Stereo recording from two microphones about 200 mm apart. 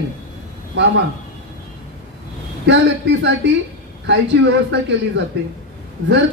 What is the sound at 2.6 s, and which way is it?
A man's voice, 60° right (ahead or behind).